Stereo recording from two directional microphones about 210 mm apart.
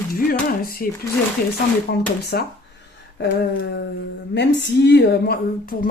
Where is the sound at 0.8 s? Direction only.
45° left (ahead or behind).